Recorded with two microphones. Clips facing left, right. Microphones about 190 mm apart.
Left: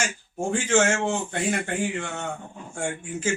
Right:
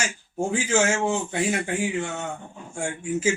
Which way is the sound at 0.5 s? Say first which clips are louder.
Left 1 dB; 5° right (ahead or behind).